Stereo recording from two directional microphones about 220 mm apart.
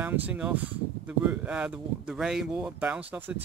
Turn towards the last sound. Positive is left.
turn(degrees=-5)  # may be behind; listen again after turning